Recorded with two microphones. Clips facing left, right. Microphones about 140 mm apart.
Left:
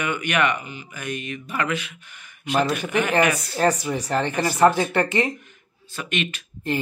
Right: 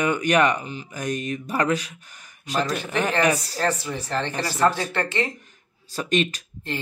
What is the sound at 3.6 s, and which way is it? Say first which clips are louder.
Speech: left 4 dB; 15° left (ahead or behind).